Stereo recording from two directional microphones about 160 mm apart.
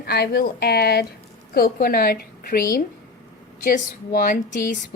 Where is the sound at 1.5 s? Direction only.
70° left (ahead or behind).